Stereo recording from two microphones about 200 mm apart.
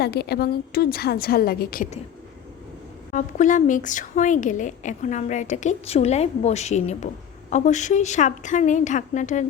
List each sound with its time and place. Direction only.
0.0 s a woman's voice: 55° left (ahead or behind)
3.1 s a woman's voice: 40° left (ahead or behind)